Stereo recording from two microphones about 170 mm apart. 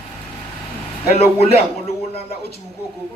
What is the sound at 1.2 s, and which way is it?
Speech, 40° left (ahead or behind).